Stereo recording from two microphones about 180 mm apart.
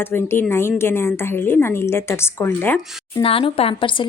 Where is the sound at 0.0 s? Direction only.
10° left (ahead or behind).